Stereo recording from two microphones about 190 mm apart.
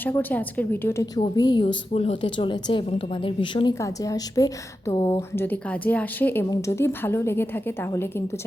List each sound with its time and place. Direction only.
0.0 s a woman's voice: 10° left (ahead or behind)
1.2 s a woman's voice: 25° left (ahead or behind)
1.6 s a woman's voice: 35° left (ahead or behind); by 8.2 s 10° left (ahead or behind)